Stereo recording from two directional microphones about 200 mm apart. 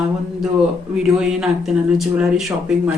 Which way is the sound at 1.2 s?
Centre (ahead or behind).